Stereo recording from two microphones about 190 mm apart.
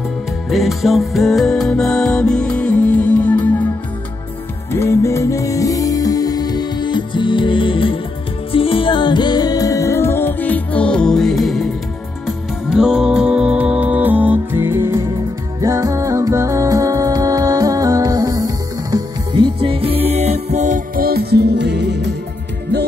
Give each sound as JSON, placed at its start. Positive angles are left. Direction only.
{"t": 0.5, "sound": "music", "side_deg": 0}
{"t": 4.7, "sound": "music", "side_deg": 15}